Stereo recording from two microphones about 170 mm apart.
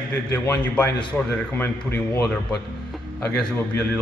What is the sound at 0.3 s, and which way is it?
Speech, 10° left (ahead or behind).